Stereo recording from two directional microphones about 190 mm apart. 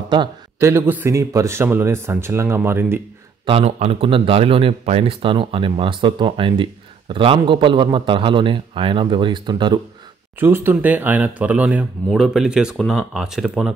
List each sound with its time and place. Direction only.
0.1 s a man's voice: 20° right (ahead or behind)
3.4 s speech: 30° right (ahead or behind)
10.4 s speech: 10° right (ahead or behind)